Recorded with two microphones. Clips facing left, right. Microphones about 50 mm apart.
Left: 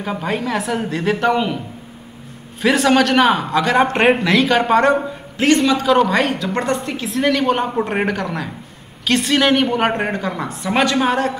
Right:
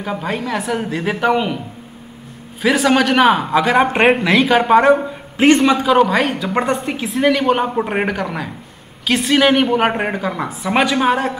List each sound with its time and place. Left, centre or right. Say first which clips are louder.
0.0 s speech: even; centre
2.6 s speech: even; centre
5.4 s a man's voice: right 3 dB; right
5.9 s speech: right 1 dB; centre